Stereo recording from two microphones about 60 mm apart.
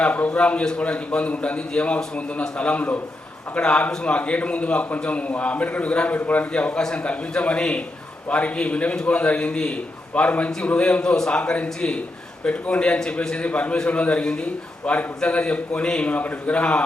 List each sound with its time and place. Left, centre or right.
0.0 s a man's voice: left